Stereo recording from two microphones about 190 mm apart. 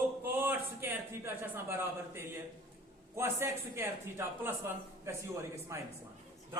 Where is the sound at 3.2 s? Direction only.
10° right (ahead or behind).